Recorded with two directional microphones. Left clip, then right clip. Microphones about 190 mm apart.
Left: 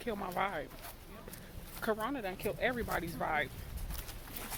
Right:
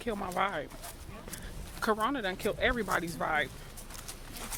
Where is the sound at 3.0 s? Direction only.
20° right (ahead or behind).